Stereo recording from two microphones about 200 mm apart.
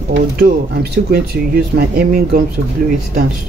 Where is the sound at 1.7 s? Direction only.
50° right (ahead or behind).